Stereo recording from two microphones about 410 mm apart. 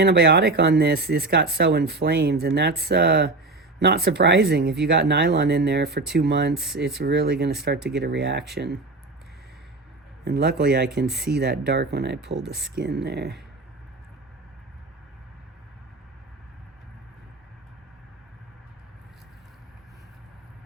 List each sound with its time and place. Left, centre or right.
0.0 s speech: right
10.2 s speech: right
10.8 s speech: centre
11.3 s speech: right
12.4 s speech: centre
12.7 s speech: right